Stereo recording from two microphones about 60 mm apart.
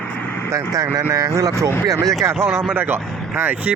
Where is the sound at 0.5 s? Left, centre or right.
Right.